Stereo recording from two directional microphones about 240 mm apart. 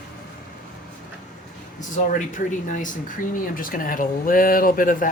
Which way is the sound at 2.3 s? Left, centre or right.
Left.